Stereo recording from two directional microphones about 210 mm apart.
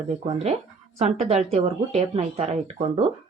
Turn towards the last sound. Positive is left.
turn(degrees=-30)  # may be behind; listen again after turning